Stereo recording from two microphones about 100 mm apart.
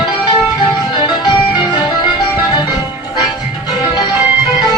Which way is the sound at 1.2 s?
40° left (ahead or behind).